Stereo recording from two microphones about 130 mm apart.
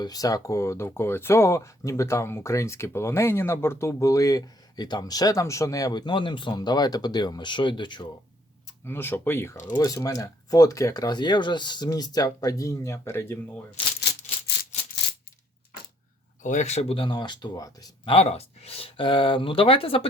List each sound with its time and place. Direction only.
0.0 s speech: 30° left (ahead or behind)
8.8 s speech: 15° left (ahead or behind)
9.6 s speech: 30° left (ahead or behind)
14.7 s a sound: 60° left (ahead or behind)
16.4 s speech: 65° left (ahead or behind); by 18.1 s 30° left (ahead or behind)
18.1 s speech: 50° left (ahead or behind)